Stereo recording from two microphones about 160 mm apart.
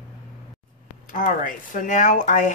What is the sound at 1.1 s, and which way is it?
Speech, 55° left (ahead or behind).